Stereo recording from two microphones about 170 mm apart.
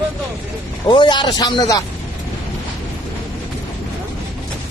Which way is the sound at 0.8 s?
25° left (ahead or behind).